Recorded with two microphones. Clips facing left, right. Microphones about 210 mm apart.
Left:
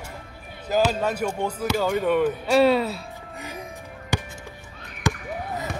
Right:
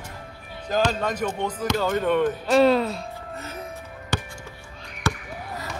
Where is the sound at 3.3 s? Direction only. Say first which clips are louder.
Left 2 dB; 15° left (ahead or behind).